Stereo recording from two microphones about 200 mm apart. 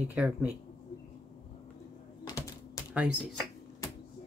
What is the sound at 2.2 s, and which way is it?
Typing, 15° left (ahead or behind).